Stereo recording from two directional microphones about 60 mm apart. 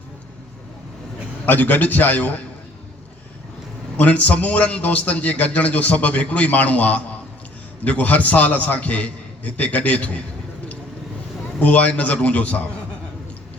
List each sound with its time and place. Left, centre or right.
1.5 s a man's voice: left
3.9 s a man's voice: left
11.6 s a man's voice: left